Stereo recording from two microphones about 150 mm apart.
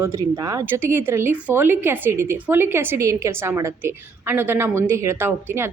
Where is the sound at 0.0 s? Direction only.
20° right (ahead or behind).